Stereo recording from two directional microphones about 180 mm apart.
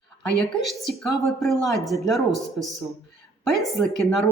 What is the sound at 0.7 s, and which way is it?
Speech, centre (ahead or behind).